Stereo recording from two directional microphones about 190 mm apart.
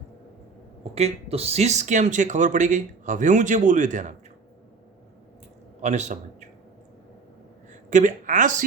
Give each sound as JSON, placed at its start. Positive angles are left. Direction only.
{"t": 0.9, "sound": "speech", "side_deg": -30}
{"t": 5.8, "sound": "a man's voice", "side_deg": -40}
{"t": 7.7, "sound": "speech", "side_deg": -40}